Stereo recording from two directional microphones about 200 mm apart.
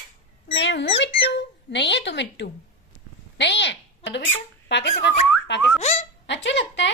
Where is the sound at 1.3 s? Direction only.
60° left (ahead or behind).